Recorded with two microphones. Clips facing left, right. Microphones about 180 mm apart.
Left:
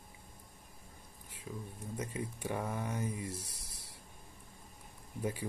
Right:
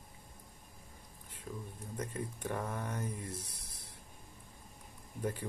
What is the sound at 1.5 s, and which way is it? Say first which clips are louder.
Speech: left 1 dB; centre (ahead or behind).